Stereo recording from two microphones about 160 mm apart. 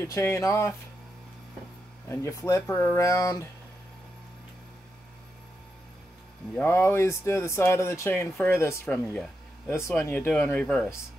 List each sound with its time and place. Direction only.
0.0 s speech: 15° left (ahead or behind)
2.0 s speech: 20° left (ahead or behind)
2.7 s a sound: 15° left (ahead or behind)
6.5 s speech: 15° left (ahead or behind)
9.7 s speech: 15° left (ahead or behind)